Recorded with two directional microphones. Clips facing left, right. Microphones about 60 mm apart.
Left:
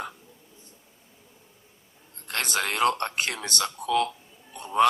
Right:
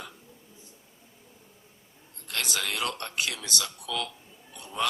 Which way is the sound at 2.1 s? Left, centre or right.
Left.